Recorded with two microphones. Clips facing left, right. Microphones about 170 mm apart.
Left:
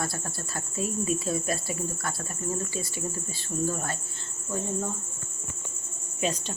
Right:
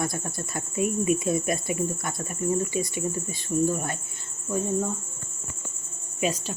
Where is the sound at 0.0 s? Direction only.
20° right (ahead or behind).